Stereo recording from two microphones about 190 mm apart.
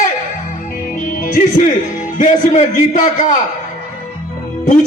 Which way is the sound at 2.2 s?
45° left (ahead or behind).